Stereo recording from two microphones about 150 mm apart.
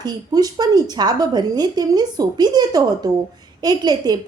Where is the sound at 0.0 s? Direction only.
25° right (ahead or behind).